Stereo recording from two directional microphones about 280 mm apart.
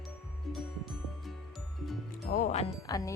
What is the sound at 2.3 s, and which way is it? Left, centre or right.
Music, left.